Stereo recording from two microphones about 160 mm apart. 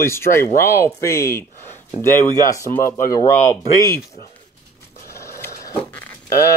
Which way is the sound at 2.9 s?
20° left (ahead or behind).